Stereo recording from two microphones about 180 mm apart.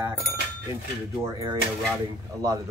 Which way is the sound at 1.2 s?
20° right (ahead or behind).